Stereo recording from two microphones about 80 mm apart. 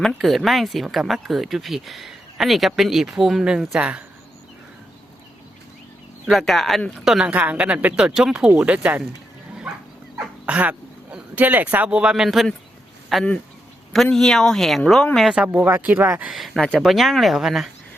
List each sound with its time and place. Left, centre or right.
0.2 s speech: centre
6.3 s speech: centre
7.3 s speech: centre
10.4 s speech: centre
15.4 s speech: right
16.6 s speech: centre
16.8 s speech: centre